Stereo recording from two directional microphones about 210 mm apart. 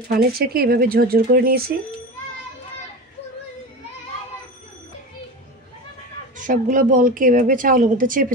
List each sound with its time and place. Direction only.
0.1 s speech: 45° right (ahead or behind)
6.3 s speech: 40° right (ahead or behind)